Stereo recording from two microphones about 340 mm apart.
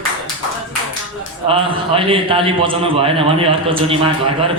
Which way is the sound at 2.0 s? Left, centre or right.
Centre.